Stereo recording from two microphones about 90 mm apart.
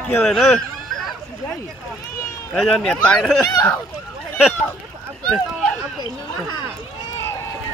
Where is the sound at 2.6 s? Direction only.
5° left (ahead or behind).